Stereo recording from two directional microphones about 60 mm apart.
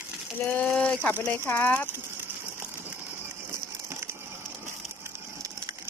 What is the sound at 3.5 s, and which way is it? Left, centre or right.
Crushing, right.